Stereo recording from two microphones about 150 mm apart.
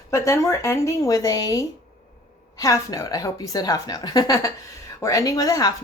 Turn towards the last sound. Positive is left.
turn(degrees=25)  # may be behind; listen again after turning